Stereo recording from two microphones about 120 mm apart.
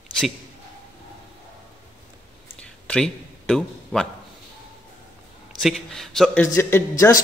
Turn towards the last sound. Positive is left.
turn(degrees=25)  # may be behind; listen again after turning